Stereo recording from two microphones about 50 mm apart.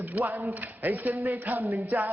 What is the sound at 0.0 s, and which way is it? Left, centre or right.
Speech, right.